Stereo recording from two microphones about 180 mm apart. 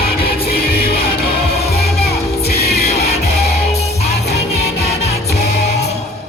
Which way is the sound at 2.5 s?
60° left (ahead or behind).